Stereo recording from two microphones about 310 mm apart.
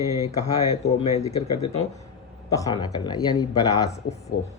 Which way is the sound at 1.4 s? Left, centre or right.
Left.